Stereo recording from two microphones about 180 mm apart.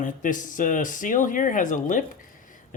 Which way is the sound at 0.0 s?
45° left (ahead or behind).